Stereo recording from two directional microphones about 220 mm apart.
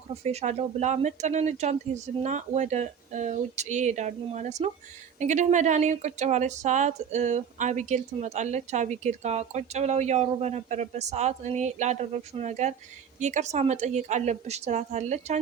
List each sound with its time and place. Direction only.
0.1 s speech: 30° right (ahead or behind)